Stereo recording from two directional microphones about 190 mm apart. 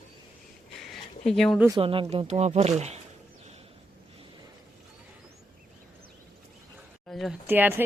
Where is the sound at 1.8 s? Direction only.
30° right (ahead or behind).